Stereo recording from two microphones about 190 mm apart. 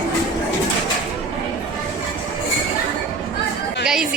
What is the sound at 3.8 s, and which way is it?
Chatter, 5° right (ahead or behind).